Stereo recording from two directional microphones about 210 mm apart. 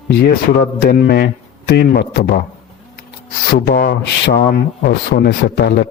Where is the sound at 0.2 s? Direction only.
50° left (ahead or behind).